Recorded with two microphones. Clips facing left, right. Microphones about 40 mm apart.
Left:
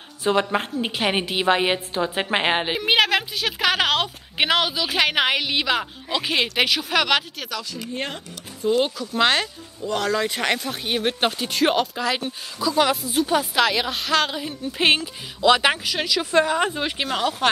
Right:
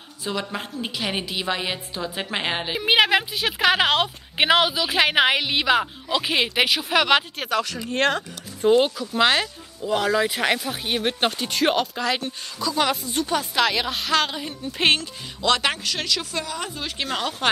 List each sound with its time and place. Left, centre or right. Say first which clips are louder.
0.2 s a woman's voice: left 7 dB; left
2.8 s speech: right 3 dB; centre
3.8 s speech: right 1 dB; centre
7.3 s speech: right 7 dB; right
7.6 s speech: right 7 dB; right
8.7 s speech: left 1 dB; centre
16.3 s speech: left 10 dB; left
17.1 s speech: left 3 dB; centre